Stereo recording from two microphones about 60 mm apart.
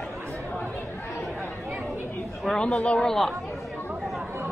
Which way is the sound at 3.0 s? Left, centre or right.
Centre.